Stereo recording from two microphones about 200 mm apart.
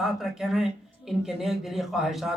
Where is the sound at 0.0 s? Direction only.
Centre (ahead or behind).